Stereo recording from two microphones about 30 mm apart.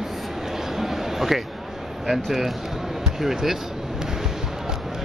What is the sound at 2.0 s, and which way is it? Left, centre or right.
Speech, centre.